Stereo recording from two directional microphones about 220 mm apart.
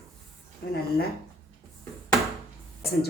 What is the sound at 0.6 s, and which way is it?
Speech, 45° left (ahead or behind).